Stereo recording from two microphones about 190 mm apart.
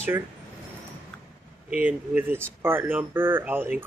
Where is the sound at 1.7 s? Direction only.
10° right (ahead or behind).